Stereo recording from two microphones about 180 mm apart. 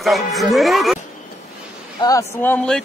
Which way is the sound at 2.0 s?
20° left (ahead or behind).